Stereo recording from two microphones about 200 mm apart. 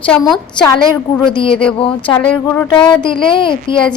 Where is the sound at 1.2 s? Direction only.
25° left (ahead or behind).